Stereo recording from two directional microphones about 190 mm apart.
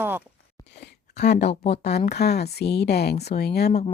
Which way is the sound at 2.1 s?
60° left (ahead or behind).